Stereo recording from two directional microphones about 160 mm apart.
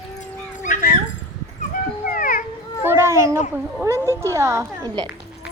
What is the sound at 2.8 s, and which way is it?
A woman's voice, 15° right (ahead or behind).